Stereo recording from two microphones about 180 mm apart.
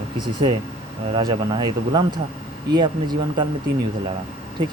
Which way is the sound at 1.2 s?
25° right (ahead or behind).